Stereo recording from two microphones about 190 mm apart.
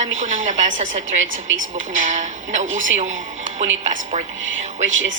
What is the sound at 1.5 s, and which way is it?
Speech, 90° right.